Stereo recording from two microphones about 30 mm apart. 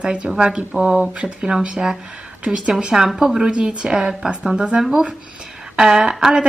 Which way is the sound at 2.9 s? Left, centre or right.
Right.